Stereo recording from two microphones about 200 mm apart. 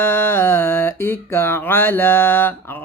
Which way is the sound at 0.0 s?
10° left (ahead or behind).